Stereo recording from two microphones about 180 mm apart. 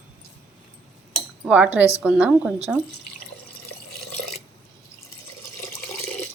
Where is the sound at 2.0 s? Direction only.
5° right (ahead or behind).